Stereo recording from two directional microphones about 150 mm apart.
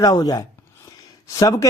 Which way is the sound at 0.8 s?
25° left (ahead or behind).